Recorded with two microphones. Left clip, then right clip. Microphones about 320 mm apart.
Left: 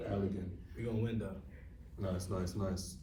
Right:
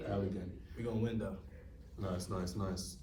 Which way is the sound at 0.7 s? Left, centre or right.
Centre.